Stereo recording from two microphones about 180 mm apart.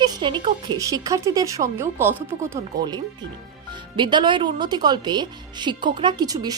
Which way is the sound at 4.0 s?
25° right (ahead or behind).